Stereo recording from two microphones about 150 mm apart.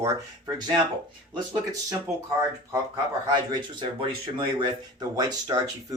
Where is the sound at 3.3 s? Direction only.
30° right (ahead or behind).